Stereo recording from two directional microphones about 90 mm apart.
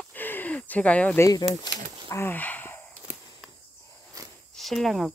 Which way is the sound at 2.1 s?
25° left (ahead or behind).